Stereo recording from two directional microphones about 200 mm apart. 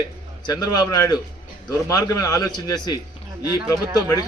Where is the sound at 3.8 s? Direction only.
10° right (ahead or behind).